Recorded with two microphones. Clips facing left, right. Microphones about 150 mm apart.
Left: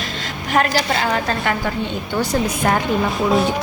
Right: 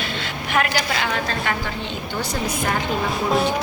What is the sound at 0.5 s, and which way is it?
A woman's voice, 35° left (ahead or behind).